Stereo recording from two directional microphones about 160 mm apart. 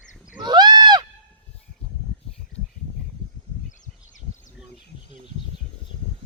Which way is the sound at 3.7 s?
50° left (ahead or behind).